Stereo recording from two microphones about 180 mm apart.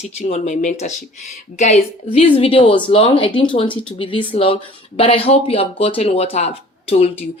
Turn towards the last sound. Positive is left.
turn(degrees=35)  # may be behind; listen again after turning